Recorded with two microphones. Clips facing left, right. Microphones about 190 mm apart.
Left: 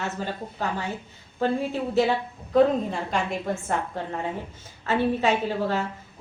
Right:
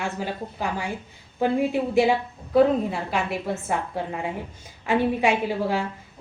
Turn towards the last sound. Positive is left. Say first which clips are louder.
# right 1 dB
turn(degrees=-10)  # may be behind; listen again after turning